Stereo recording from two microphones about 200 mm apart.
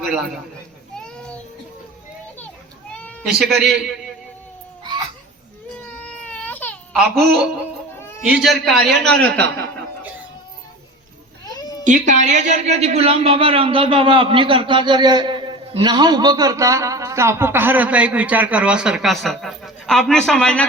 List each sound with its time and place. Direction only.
0.9 s child singing: 5° left (ahead or behind)
3.0 s cat: centre (ahead or behind)
4.8 s baby cry: 20° right (ahead or behind)
5.9 s baby cry: 5° left (ahead or behind)
7.0 s a man's voice: centre (ahead or behind)
11.4 s cat: 20° left (ahead or behind)
11.9 s a man's voice: 40° right (ahead or behind); by 20.7 s 5° left (ahead or behind)